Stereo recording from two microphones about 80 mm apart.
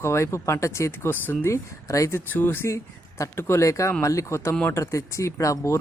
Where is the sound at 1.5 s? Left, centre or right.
Left.